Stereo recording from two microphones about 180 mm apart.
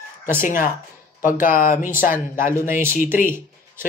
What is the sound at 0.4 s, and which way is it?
Speech, 50° left (ahead or behind).